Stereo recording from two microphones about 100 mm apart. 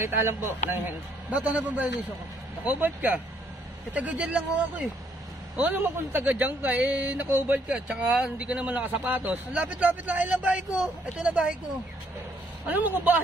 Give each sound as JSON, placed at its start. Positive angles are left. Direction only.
{"t": 0.0, "sound": "a man's voice", "side_deg": -25}
{"t": 12.6, "sound": "a man's voice", "side_deg": -15}